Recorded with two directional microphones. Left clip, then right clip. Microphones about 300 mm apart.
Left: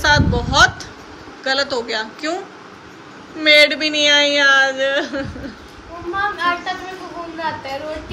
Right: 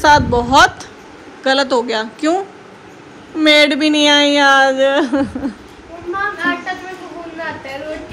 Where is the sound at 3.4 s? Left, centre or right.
Centre.